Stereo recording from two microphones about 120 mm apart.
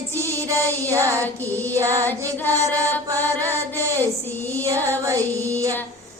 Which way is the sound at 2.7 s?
15° left (ahead or behind).